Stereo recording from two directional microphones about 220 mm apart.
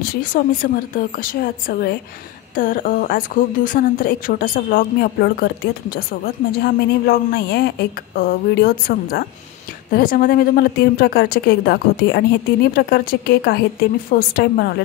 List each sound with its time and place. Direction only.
0.0 s a woman's voice: 40° left (ahead or behind)